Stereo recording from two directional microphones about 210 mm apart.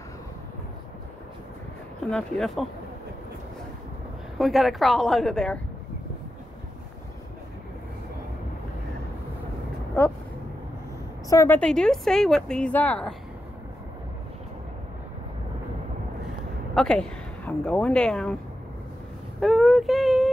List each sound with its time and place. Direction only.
2.0 s speech: 5° left (ahead or behind)
4.4 s speech: centre (ahead or behind)
11.2 s speech: 10° left (ahead or behind)
16.7 s speech: 5° left (ahead or behind)
19.4 s speech: centre (ahead or behind)